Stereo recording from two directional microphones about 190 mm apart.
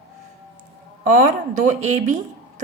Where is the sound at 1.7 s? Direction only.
40° right (ahead or behind).